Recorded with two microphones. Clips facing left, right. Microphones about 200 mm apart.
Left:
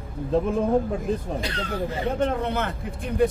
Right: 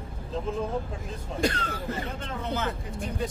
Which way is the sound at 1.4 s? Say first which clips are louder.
Right 3 dB; 45° right (ahead or behind).